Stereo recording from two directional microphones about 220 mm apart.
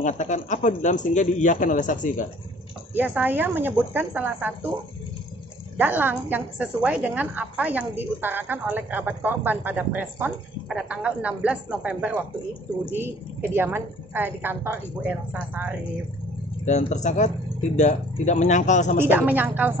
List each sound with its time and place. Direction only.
0.0 s speech: 35° left (ahead or behind)
2.9 s a woman's voice: 10° right (ahead or behind)
5.8 s a woman's voice: 10° right (ahead or behind)
16.6 s speech: 30° left (ahead or behind)
19.0 s a woman's voice: 10° right (ahead or behind)